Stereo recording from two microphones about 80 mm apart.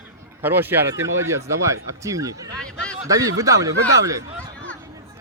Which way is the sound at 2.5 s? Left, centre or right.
Centre.